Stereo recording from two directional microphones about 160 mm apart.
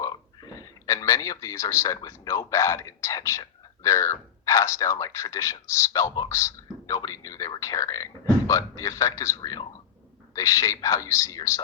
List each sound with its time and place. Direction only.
0.0 s speech: 25° left (ahead or behind)